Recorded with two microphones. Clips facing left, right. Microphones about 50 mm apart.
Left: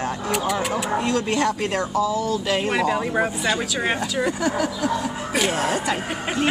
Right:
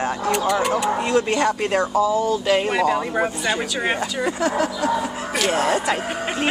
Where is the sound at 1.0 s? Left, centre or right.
Centre.